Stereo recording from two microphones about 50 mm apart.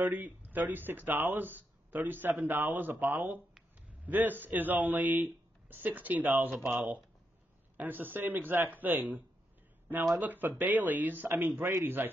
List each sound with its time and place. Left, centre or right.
0.0 s speech: right
7.7 s a man's voice: right